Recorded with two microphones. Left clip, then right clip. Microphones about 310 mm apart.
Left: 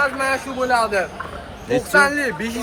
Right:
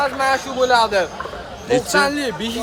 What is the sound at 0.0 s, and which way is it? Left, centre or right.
A man's voice, right.